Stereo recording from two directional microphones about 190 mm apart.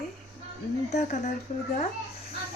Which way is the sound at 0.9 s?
35° left (ahead or behind).